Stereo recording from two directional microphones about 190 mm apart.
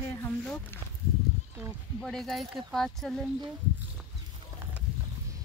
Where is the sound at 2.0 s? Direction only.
Centre (ahead or behind).